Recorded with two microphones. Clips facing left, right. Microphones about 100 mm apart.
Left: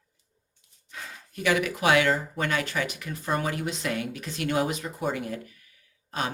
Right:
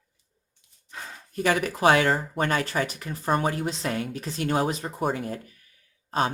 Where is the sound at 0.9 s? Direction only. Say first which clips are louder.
Right 2 dB; 35° right (ahead or behind).